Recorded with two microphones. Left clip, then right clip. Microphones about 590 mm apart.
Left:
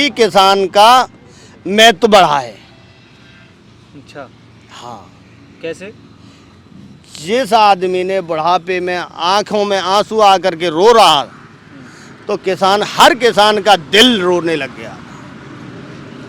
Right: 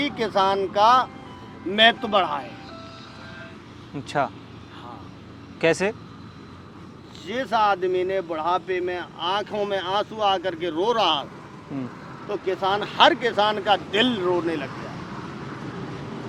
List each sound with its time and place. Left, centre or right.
0.0 s a man's voice: left
5.6 s speech: centre
7.1 s a man's voice: left
12.3 s a man's voice: left